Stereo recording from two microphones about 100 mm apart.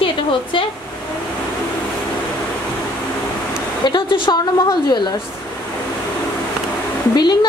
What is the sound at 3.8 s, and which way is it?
Speech, 55° left (ahead or behind).